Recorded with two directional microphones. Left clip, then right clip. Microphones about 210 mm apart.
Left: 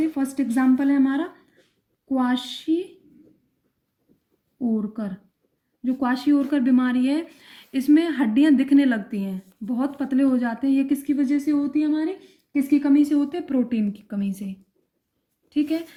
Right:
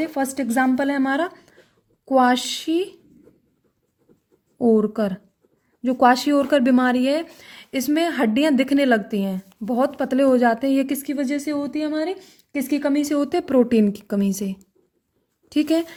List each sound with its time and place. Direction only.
0.1 s speech: 50° right (ahead or behind)
4.5 s speech: 55° right (ahead or behind)
15.5 s speech: 45° right (ahead or behind)